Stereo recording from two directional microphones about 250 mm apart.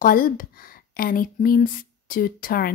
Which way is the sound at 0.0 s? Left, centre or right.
Left.